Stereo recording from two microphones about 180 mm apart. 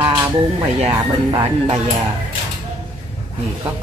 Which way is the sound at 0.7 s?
35° right (ahead or behind).